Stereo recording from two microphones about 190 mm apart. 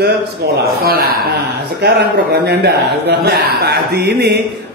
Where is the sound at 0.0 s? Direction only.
55° right (ahead or behind).